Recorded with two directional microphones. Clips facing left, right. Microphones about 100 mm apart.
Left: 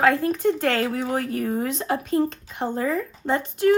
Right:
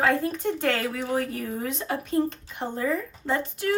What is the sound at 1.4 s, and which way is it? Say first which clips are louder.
A woman's voice: left 5 dB; 55° left (ahead or behind).